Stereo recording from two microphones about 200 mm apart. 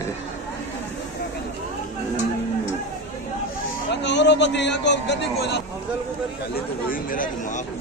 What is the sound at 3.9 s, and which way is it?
A man's voice, 60° left (ahead or behind).